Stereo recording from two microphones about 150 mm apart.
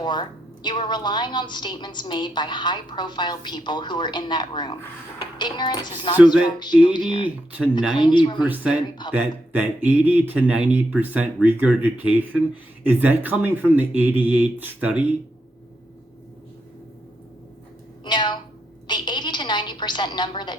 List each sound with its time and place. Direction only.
0.0 s a woman's voice: 30° left (ahead or behind)
7.3 s speech: 10° right (ahead or behind)
7.9 s speech: 30° left (ahead or behind)
8.4 s speech: 10° right (ahead or behind)
18.0 s a sound: 30° left (ahead or behind)